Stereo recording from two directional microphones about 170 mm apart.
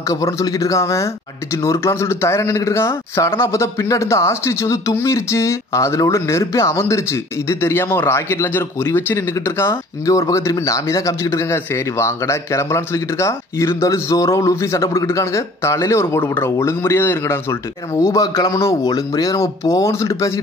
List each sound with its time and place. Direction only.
0.1 s speech: 20° left (ahead or behind)